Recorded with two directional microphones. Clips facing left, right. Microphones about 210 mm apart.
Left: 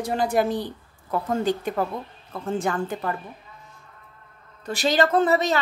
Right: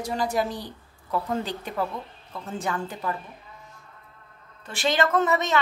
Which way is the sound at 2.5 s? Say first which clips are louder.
Left 4 dB; 50° left (ahead or behind).